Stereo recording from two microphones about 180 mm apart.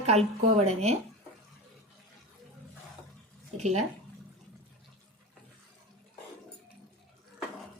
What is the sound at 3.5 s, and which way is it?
Speech, 40° right (ahead or behind).